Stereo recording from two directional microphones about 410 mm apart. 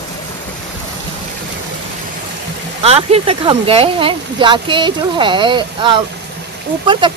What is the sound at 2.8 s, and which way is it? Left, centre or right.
Speech, centre.